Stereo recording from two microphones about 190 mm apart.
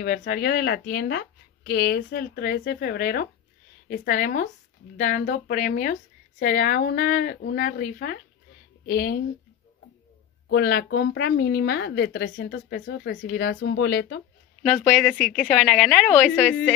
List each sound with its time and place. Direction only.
0.0 s a woman's voice: 50° left (ahead or behind)
10.5 s speech: 55° left (ahead or behind)
14.6 s speech: 10° left (ahead or behind)
14.9 s a woman's voice: 45° left (ahead or behind)
15.4 s a woman's voice: 5° left (ahead or behind)